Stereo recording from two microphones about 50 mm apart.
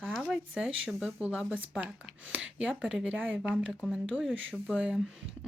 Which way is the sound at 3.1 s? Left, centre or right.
Right.